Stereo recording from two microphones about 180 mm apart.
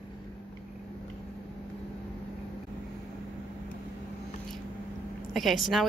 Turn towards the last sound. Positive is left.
turn(degrees=0)  # may be behind; listen again after turning